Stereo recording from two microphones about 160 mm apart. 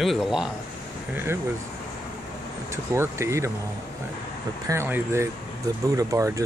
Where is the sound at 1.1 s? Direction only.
15° right (ahead or behind).